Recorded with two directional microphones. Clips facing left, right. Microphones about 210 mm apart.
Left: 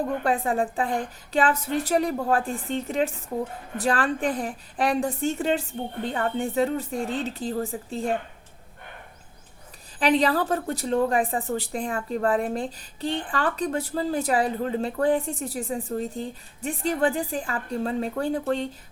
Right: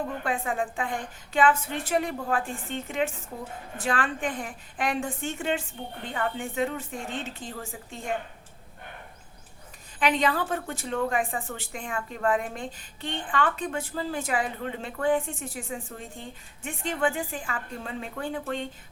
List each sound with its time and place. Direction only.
0.2 s a woman's voice: 35° left (ahead or behind)
10.0 s a woman's voice: 35° left (ahead or behind)